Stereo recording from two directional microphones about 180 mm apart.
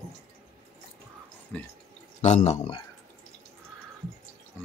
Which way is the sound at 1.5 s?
5° left (ahead or behind).